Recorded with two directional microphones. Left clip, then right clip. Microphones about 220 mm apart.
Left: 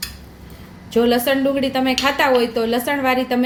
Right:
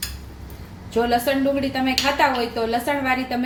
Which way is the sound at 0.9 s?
40° left (ahead or behind).